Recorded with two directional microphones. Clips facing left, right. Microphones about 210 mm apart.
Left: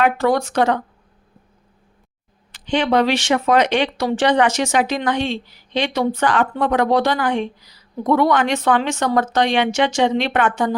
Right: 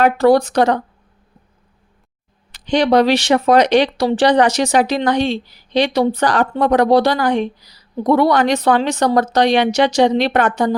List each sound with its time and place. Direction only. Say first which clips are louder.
0.0 s speech: right 5 dB; 35° right (ahead or behind)
2.5 s speech: right 4 dB; 40° right (ahead or behind)